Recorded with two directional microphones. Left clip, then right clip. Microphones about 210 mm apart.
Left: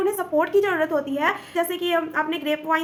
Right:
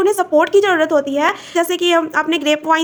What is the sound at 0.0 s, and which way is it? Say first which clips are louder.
Speech: right 8 dB; 40° right (ahead or behind).